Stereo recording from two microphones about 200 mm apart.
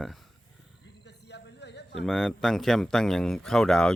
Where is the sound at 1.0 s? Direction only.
55° left (ahead or behind).